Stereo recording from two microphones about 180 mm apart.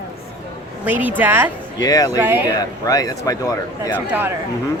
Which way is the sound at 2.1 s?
10° right (ahead or behind).